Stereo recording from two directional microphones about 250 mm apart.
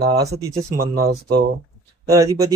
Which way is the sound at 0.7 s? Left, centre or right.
Right.